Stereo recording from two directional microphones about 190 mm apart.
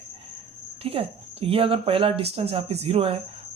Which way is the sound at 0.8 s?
30° right (ahead or behind).